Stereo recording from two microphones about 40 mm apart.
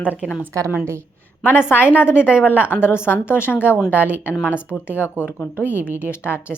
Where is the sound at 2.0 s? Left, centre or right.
Left.